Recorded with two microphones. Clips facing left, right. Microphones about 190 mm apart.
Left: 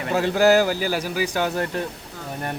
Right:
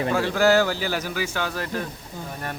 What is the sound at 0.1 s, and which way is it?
A man's voice, 20° left (ahead or behind).